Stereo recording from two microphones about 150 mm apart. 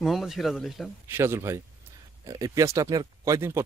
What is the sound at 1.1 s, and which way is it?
Speech, 15° right (ahead or behind).